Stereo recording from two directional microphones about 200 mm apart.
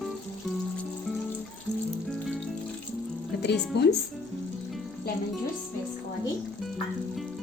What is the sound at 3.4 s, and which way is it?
Speech, 55° left (ahead or behind).